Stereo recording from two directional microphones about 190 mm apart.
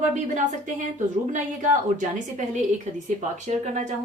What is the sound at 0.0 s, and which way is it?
A woman's voice, 40° right (ahead or behind).